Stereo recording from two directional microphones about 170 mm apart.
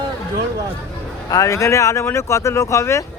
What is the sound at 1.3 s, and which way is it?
Speech, 20° left (ahead or behind).